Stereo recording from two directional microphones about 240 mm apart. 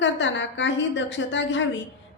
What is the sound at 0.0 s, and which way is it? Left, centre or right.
A woman's voice, left.